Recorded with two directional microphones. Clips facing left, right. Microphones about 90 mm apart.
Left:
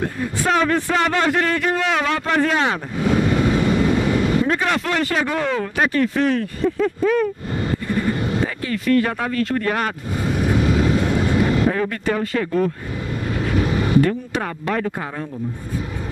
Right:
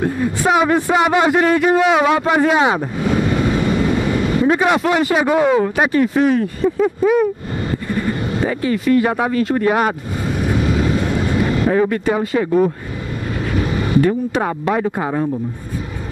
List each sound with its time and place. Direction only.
0.0 s a man's voice: 15° right (ahead or behind)
10.4 s vehicle: 20° right (ahead or behind)
14.3 s a man's voice: 15° right (ahead or behind)